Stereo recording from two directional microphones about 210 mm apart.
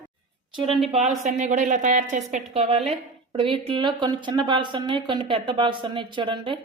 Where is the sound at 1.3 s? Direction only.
35° right (ahead or behind).